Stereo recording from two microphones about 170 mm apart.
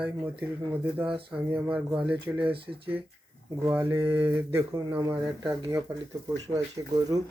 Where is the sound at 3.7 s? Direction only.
15° right (ahead or behind).